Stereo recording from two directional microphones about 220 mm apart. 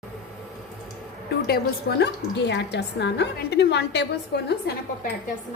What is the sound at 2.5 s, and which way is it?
A woman's voice, 50° left (ahead or behind).